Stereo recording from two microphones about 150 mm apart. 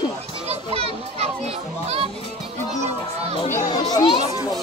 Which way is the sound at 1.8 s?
45° right (ahead or behind).